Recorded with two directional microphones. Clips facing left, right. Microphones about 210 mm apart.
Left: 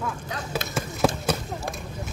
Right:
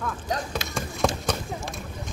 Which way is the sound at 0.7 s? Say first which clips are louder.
Left 2 dB; 5° left (ahead or behind).